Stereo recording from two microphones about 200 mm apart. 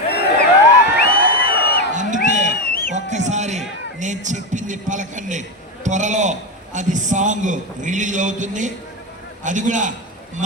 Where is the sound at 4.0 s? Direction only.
40° right (ahead or behind).